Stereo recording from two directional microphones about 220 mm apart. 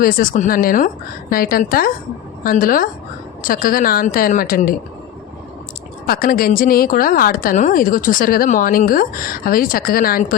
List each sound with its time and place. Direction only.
0.0 s a woman's voice: 40° left (ahead or behind)
6.1 s a woman's voice: 40° left (ahead or behind)